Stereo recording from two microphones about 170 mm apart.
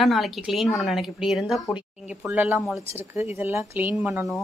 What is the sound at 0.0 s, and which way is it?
A woman's voice, centre (ahead or behind).